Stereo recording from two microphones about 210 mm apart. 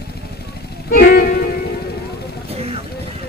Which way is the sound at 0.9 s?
45° left (ahead or behind).